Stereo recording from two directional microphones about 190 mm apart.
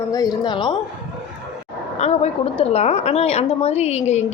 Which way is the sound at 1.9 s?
35° left (ahead or behind).